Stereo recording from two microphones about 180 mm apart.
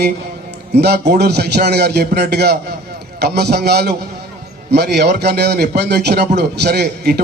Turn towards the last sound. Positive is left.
turn(degrees=-60)  # may be behind; listen again after turning